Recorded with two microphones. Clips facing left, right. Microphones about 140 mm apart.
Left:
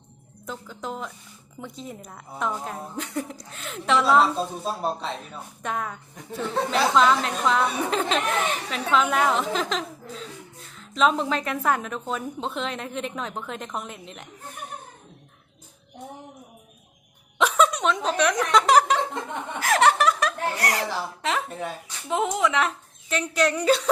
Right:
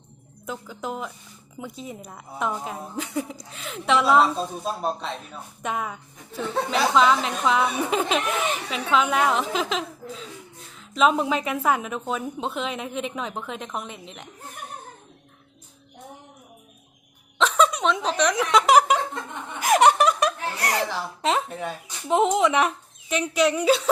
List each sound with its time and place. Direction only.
0.4 s a woman's voice: 10° right (ahead or behind)
17.3 s chuckle: 5° left (ahead or behind)
18.3 s speech: 10° right (ahead or behind)
19.5 s giggle: 15° right (ahead or behind)
21.2 s a woman's voice: 20° right (ahead or behind); by 23.9 s 5° right (ahead or behind)